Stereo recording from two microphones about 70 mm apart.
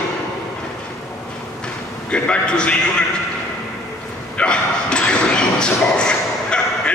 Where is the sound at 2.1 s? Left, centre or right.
Centre.